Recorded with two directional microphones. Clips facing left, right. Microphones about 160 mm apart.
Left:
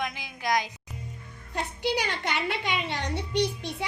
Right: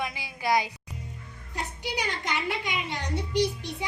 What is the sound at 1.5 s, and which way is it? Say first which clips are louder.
A woman's voice: left 5 dB; 65° left (ahead or behind).